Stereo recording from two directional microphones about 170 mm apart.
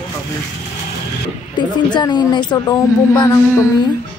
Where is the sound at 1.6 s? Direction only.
25° left (ahead or behind).